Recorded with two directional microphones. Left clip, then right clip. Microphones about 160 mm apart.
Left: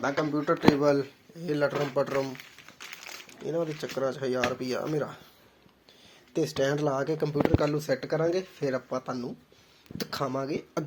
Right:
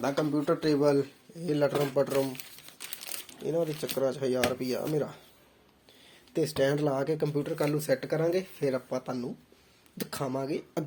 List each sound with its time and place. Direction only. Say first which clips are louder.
0.0 s speech: left 1 dB; 50° right (ahead or behind)
0.8 s speech: left 1 dB; 25° right (ahead or behind)
1.4 s speech: even; 40° right (ahead or behind)
3.4 s speech: right 1 dB; 40° right (ahead or behind)
4.6 s speech: even; 30° right (ahead or behind)
6.3 s speech: even; 25° right (ahead or behind)
10.0 s speech: left 2 dB; 15° right (ahead or behind)